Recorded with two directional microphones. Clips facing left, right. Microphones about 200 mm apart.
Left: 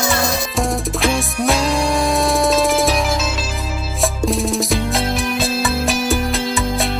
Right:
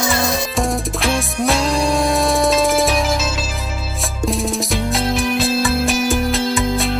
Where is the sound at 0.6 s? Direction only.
Centre (ahead or behind).